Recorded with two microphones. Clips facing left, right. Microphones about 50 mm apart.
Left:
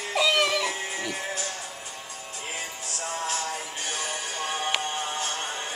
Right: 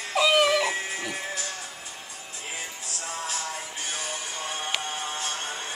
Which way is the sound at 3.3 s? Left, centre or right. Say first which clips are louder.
Left 2 dB; left.